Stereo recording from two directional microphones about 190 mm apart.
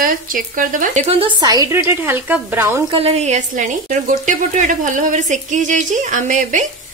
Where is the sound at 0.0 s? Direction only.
45° right (ahead or behind); by 2.8 s 10° right (ahead or behind).